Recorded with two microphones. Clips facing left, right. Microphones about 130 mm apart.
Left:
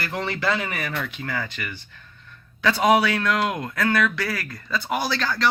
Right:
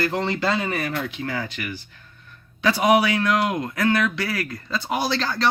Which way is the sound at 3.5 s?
25° right (ahead or behind).